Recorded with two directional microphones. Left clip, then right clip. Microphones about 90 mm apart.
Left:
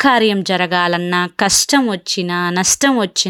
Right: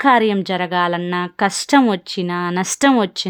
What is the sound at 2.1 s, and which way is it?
Speech, 15° left (ahead or behind).